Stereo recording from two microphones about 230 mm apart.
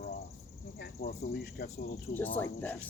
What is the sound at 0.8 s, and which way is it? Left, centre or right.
Speech, left.